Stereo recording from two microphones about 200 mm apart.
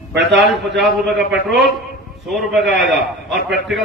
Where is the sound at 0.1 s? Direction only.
60° right (ahead or behind).